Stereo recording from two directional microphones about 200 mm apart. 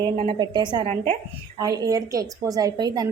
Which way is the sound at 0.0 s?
20° right (ahead or behind).